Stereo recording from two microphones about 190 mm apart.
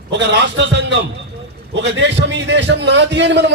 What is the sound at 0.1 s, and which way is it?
A man's voice, 65° right (ahead or behind).